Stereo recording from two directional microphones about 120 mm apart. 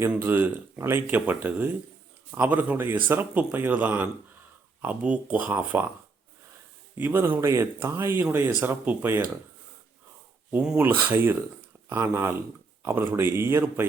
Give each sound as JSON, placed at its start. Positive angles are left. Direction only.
{"t": 0.1, "sound": "speech", "side_deg": -15}
{"t": 6.9, "sound": "speech", "side_deg": -15}
{"t": 10.5, "sound": "speech", "side_deg": -10}